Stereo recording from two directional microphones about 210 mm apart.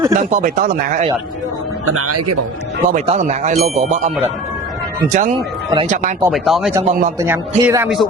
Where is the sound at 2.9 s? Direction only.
35° right (ahead or behind).